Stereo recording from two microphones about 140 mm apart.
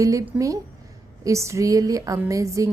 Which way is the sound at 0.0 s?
25° right (ahead or behind).